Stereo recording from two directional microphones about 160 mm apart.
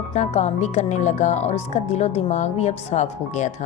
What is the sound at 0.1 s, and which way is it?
Speech, 45° left (ahead or behind).